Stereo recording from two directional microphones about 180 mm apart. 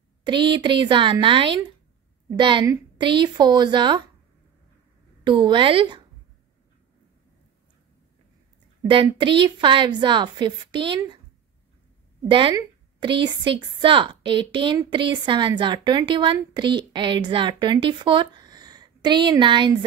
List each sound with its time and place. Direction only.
0.2 s a woman's voice: 25° right (ahead or behind)
5.2 s a woman's voice: 25° right (ahead or behind)
8.8 s a woman's voice: 30° right (ahead or behind)
12.3 s a woman's voice: 25° right (ahead or behind)